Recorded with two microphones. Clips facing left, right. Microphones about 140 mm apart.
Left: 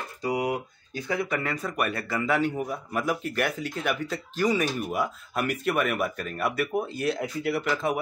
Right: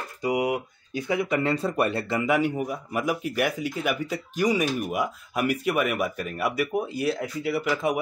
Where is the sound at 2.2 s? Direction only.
15° right (ahead or behind).